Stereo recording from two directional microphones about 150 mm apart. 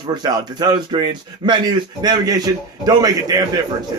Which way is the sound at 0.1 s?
25° right (ahead or behind).